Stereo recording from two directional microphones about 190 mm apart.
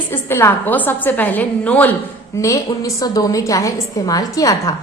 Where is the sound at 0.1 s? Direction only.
15° left (ahead or behind).